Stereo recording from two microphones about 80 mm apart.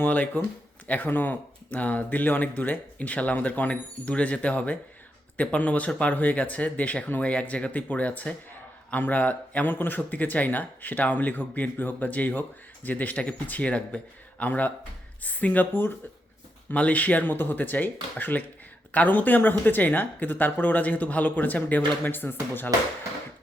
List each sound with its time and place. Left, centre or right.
0.0 s speech: left